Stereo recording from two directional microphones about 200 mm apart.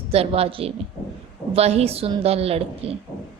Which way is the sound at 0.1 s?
30° right (ahead or behind).